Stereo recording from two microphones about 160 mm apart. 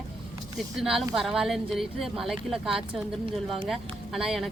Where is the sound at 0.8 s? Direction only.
Centre (ahead or behind).